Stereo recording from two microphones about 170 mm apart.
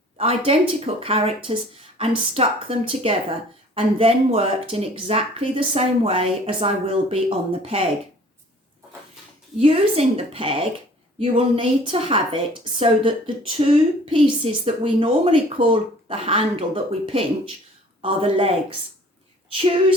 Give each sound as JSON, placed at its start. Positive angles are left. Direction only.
{"t": 0.2, "sound": "speech", "side_deg": -35}
{"t": 9.6, "sound": "speech", "side_deg": -35}